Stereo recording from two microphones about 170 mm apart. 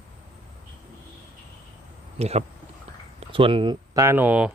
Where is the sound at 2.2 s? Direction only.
40° right (ahead or behind); by 4.5 s 10° right (ahead or behind).